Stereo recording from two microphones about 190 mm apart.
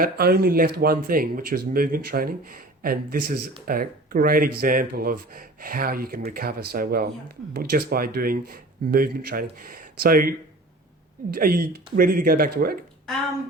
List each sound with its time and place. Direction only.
0.0 s speech: 55° right (ahead or behind)